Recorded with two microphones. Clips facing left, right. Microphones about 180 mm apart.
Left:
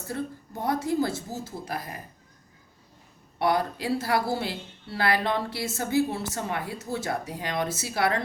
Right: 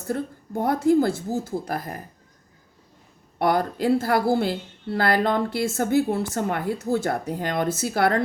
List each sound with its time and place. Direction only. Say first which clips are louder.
0.1 s a woman's voice: right 6 dB; 55° right (ahead or behind)
3.3 s a woman's voice: right 3 dB; 50° right (ahead or behind)